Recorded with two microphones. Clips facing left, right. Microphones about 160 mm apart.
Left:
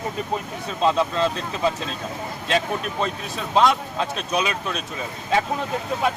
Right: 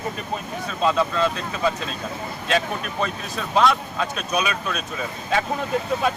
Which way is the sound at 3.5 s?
25° left (ahead or behind).